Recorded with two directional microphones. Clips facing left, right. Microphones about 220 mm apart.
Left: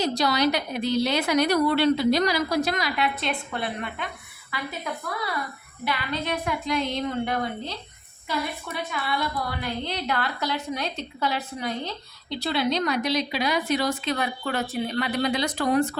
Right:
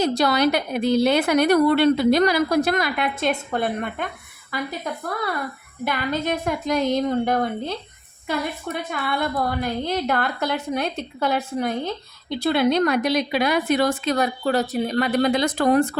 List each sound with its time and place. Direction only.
0.0 s a woman's voice: 55° right (ahead or behind)
5.8 s a woman's voice: 45° right (ahead or behind)